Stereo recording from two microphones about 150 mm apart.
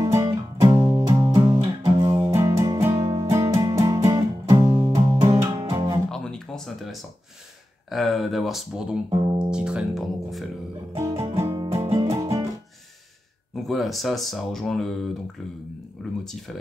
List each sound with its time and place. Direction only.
0.0 s music: 20° right (ahead or behind)
6.0 s music: 5° left (ahead or behind)
7.9 s speech: centre (ahead or behind)
9.1 s speech: 30° right (ahead or behind)
9.5 s speech: 5° right (ahead or behind)
11.0 s music: 20° right (ahead or behind)
13.7 s speech: centre (ahead or behind)
16.0 s speech: centre (ahead or behind)